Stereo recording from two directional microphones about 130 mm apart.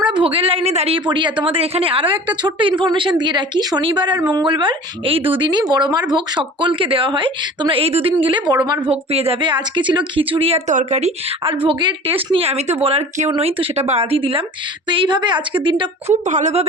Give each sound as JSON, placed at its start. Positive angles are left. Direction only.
{"t": 0.1, "sound": "speech", "side_deg": -40}
{"t": 8.9, "sound": "speech", "side_deg": -50}
{"t": 10.7, "sound": "speech", "side_deg": -60}
{"t": 11.6, "sound": "speech", "side_deg": -40}
{"t": 16.2, "sound": "speech", "side_deg": -65}